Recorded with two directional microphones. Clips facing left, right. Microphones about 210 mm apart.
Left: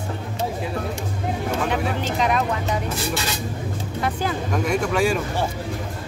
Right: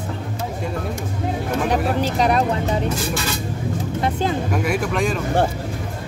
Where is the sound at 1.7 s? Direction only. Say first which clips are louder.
Right 4 dB; 35° right (ahead or behind).